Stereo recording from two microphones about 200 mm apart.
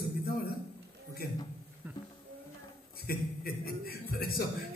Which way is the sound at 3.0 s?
50° left (ahead or behind).